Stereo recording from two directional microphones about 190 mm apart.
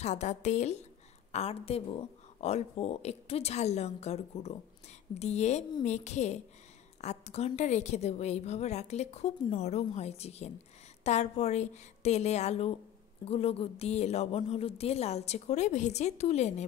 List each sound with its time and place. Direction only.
0.0 s a woman's voice: 40° left (ahead or behind)